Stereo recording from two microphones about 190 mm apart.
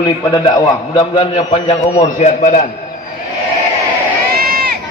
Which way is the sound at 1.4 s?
35° left (ahead or behind).